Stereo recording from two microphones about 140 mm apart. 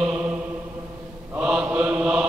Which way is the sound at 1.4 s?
10° right (ahead or behind).